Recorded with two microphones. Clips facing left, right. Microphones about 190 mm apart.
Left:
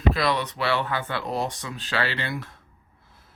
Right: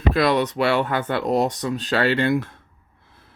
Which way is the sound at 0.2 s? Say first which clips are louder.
Right 6 dB; 45° right (ahead or behind).